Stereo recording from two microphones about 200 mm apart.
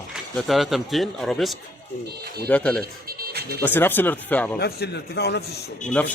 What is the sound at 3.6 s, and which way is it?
Speech, 10° left (ahead or behind).